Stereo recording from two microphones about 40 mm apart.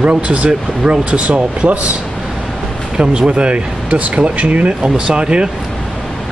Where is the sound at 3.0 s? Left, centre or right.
Right.